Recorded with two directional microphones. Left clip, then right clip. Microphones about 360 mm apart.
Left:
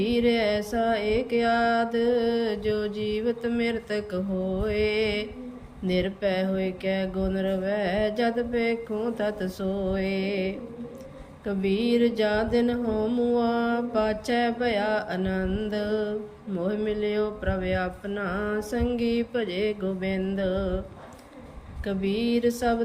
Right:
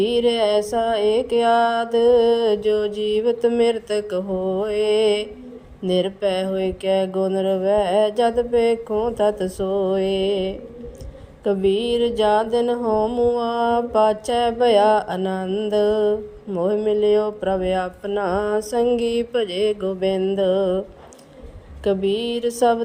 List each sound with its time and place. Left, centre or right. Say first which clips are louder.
0.0 s music: right 6 dB; centre
20.5 s a sound: right 10 dB; right
21.8 s music: right 7 dB; centre